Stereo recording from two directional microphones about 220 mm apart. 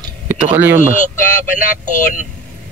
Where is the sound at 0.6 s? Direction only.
10° right (ahead or behind).